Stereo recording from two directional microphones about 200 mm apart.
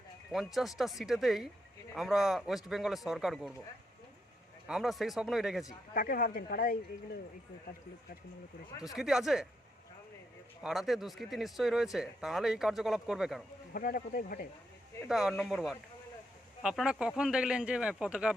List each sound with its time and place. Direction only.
0.3 s speech: centre (ahead or behind)
4.7 s speech: centre (ahead or behind)
5.9 s speech: 45° left (ahead or behind)
8.8 s speech: centre (ahead or behind)
10.6 s speech: centre (ahead or behind)
13.7 s speech: 45° left (ahead or behind)
15.0 s speech: centre (ahead or behind)